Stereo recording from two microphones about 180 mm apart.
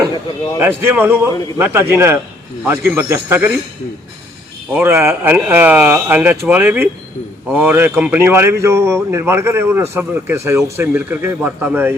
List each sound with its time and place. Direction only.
0.8 s speech: 10° right (ahead or behind)
4.7 s speech: 10° right (ahead or behind)